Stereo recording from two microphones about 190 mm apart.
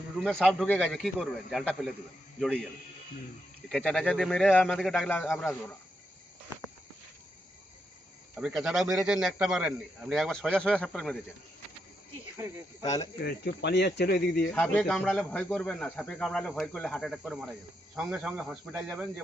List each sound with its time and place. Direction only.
0.3 s speech: 5° left (ahead or behind)
3.7 s speech: centre (ahead or behind)
8.4 s speech: 5° right (ahead or behind)
13.2 s speech: 60° left (ahead or behind)
14.5 s speech: 5° left (ahead or behind)